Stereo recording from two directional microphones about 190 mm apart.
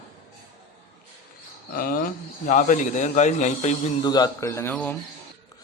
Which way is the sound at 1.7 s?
50° left (ahead or behind).